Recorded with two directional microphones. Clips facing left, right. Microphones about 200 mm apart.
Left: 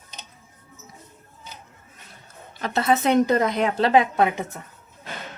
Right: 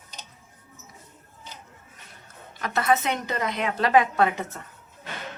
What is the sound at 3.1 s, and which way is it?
Speech, 40° left (ahead or behind).